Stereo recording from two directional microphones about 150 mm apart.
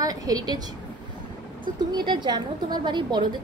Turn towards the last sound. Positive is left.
turn(degrees=-30)  # may be behind; listen again after turning